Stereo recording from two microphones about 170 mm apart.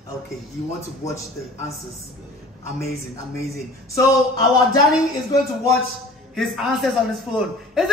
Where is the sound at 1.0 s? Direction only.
20° left (ahead or behind).